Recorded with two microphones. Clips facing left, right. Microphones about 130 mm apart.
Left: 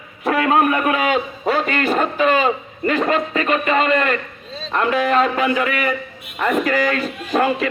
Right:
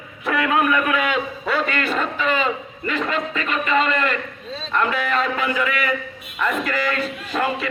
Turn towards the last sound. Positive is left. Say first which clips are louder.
# left 5 dB
turn(degrees=50)  # may be behind; listen again after turning